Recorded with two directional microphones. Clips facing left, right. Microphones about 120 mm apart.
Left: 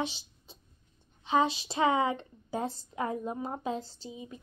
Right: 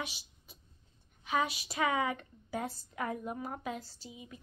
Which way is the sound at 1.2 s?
25° left (ahead or behind).